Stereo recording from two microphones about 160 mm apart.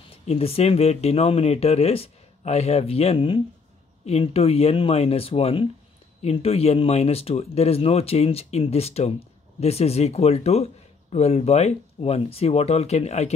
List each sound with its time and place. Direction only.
0.2 s speech: 40° left (ahead or behind)